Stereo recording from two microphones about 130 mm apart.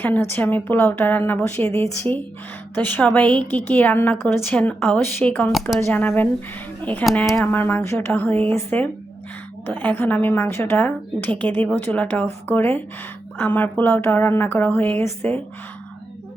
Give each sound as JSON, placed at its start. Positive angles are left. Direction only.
{"t": 0.0, "sound": "a woman's voice", "side_deg": 15}